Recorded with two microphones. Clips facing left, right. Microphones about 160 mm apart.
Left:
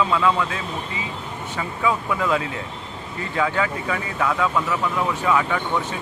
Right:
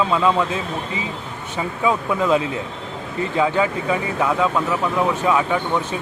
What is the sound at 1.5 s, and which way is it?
Speech, 20° right (ahead or behind).